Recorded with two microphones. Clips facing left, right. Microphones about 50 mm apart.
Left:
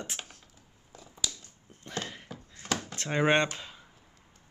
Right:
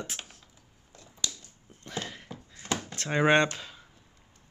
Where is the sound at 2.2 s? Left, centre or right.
Centre.